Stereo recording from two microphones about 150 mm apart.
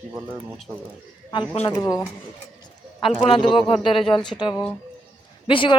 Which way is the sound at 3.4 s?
Centre (ahead or behind).